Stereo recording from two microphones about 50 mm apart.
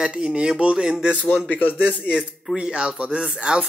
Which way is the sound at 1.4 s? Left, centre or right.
Left.